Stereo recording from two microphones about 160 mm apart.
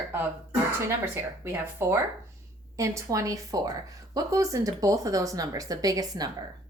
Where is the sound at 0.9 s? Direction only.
15° right (ahead or behind).